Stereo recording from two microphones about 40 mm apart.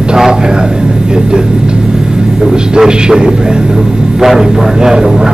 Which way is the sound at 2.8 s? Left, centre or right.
Centre.